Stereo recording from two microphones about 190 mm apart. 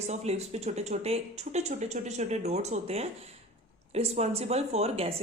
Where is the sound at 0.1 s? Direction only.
35° right (ahead or behind).